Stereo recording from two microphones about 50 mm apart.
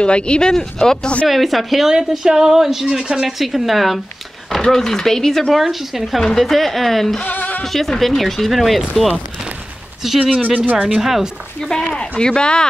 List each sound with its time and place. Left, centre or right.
0.0 s speech: left
1.2 s speech: centre
7.2 s music: left
7.6 s speech: centre
11.7 s speech: centre